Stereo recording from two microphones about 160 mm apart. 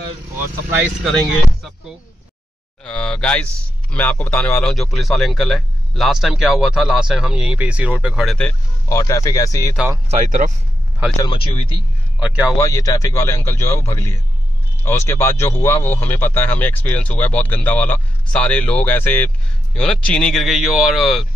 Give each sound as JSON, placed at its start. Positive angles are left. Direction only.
{"t": 2.8, "sound": "speech", "side_deg": 5}
{"t": 8.8, "sound": "speech", "side_deg": 20}
{"t": 10.0, "sound": "speech", "side_deg": -50}
{"t": 11.1, "sound": "speech", "side_deg": 35}
{"t": 12.2, "sound": "a man's voice", "side_deg": -10}
{"t": 12.5, "sound": "speech", "side_deg": 20}